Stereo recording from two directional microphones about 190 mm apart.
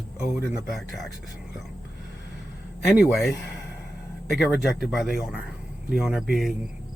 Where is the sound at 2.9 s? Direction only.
5° right (ahead or behind).